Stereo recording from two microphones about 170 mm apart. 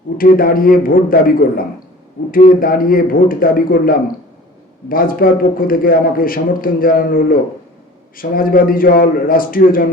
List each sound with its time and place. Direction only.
0.2 s a man's voice: 55° left (ahead or behind)